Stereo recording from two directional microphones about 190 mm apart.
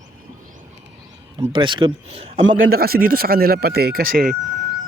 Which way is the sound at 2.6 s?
50° right (ahead or behind).